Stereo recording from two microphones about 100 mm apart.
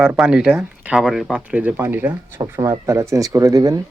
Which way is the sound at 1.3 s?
15° right (ahead or behind).